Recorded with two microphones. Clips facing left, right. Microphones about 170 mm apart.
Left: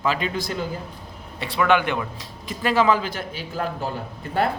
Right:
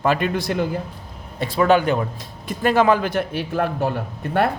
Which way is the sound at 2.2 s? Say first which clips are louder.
Right 5 dB; 50° right (ahead or behind).